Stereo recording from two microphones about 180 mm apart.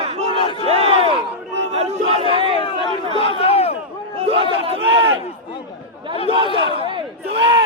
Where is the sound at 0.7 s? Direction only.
35° right (ahead or behind).